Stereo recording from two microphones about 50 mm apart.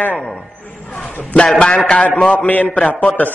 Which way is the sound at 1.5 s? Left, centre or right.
Centre.